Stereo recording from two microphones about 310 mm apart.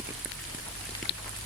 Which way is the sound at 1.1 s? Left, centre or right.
Left.